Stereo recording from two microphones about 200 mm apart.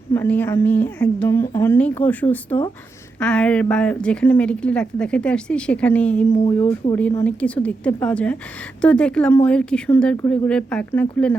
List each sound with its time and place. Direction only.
0.1 s a woman's voice: 10° left (ahead or behind)
6.3 s speech: 30° left (ahead or behind)
6.7 s a woman's voice: 15° left (ahead or behind)